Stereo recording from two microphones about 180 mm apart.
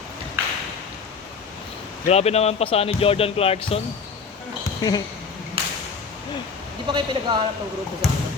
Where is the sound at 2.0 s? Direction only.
35° left (ahead or behind).